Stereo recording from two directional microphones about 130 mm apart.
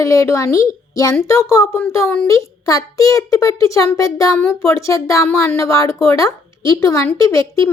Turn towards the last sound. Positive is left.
turn(degrees=25)  # may be behind; listen again after turning